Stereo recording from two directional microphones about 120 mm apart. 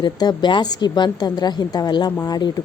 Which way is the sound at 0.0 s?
35° left (ahead or behind).